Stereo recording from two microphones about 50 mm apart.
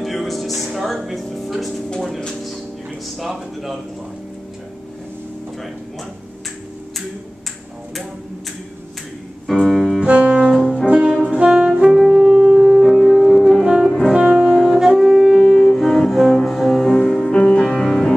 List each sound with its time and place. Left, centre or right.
0.0 s music: centre
3.2 s speech: centre
9.5 s piano: centre
9.9 s saxophone: right
10.9 s brass instrument: right
11.2 s saxophone: right
11.9 s music: centre
13.7 s brass instrument: centre
14.6 s saxophone: centre
15.3 s music: centre